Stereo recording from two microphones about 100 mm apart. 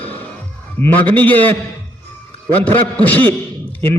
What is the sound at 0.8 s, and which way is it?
Speech, 15° left (ahead or behind).